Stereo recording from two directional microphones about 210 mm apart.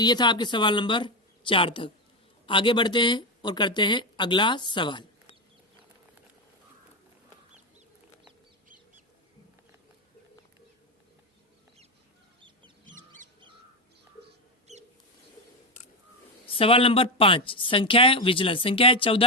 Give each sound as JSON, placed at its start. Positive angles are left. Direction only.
{"t": 0.0, "sound": "speech", "side_deg": 20}
{"t": 16.5, "sound": "speech", "side_deg": 25}